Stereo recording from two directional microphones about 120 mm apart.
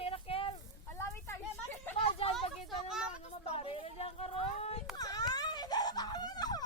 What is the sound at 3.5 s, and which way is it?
Speech, 55° left (ahead or behind).